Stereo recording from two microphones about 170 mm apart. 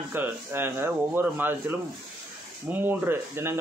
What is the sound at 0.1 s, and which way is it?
A man's voice, 10° right (ahead or behind).